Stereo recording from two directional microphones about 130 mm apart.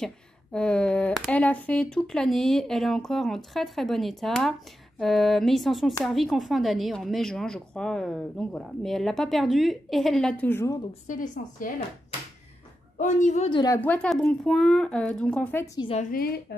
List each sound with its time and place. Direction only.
0.0 s speech: 5° left (ahead or behind)
11.1 s a woman's voice: 90° left
12.9 s a woman's voice: 70° left (ahead or behind)
13.7 s speech: 15° left (ahead or behind)
14.0 s speech: 5° left (ahead or behind)
15.5 s a woman's voice: 25° left (ahead or behind)